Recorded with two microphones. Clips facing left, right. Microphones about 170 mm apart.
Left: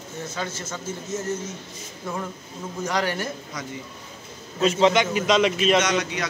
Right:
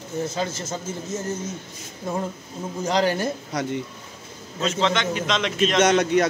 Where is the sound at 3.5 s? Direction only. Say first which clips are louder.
Right 8 dB; 70° right (ahead or behind).